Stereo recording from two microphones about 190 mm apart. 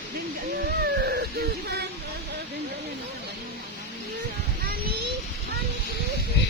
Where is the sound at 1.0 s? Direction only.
55° right (ahead or behind).